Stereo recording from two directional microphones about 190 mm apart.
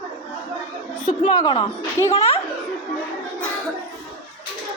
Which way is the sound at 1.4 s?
25° left (ahead or behind).